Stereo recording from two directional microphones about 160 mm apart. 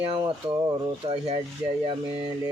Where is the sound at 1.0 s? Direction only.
35° right (ahead or behind).